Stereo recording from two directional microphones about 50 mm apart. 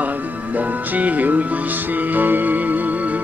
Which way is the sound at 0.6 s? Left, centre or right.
Right.